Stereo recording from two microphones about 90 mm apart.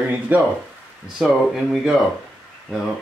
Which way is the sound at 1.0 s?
Centre (ahead or behind).